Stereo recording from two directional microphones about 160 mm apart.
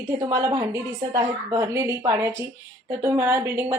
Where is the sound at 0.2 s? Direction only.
20° right (ahead or behind).